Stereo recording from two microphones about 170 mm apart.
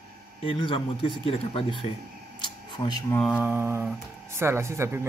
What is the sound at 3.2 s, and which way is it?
Speech, 5° right (ahead or behind).